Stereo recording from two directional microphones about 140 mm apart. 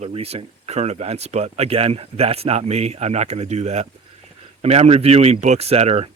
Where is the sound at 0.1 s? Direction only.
45° right (ahead or behind).